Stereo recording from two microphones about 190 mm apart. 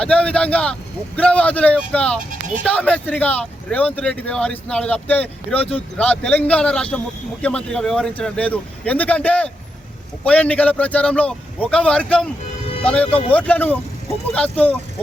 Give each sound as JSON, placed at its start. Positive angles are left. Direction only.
{"t": 0.0, "sound": "speech", "side_deg": 5}
{"t": 13.1, "sound": "speech", "side_deg": 30}
{"t": 13.3, "sound": "speech", "side_deg": 5}